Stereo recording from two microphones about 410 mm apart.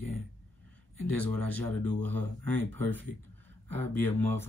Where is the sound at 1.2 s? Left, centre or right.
Right.